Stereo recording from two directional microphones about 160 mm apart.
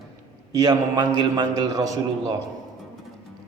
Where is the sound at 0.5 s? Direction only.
25° right (ahead or behind).